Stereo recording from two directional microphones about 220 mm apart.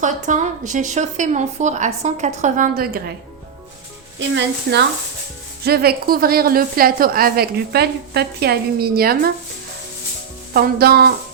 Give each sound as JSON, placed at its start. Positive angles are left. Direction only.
{"t": 0.0, "sound": "a woman's voice", "side_deg": -35}
{"t": 4.2, "sound": "a woman's voice", "side_deg": -50}
{"t": 10.5, "sound": "a woman's voice", "side_deg": -45}